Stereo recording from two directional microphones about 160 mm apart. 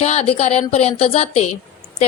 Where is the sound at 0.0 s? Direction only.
45° left (ahead or behind).